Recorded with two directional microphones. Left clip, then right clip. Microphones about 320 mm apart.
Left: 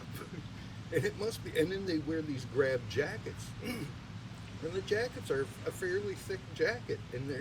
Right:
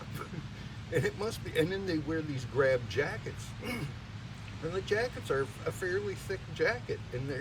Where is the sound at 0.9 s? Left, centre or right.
Centre.